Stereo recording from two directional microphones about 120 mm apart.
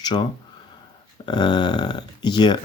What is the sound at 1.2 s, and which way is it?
Speech, 35° left (ahead or behind).